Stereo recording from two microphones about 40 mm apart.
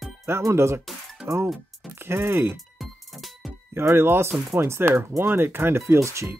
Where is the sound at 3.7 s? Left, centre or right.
Right.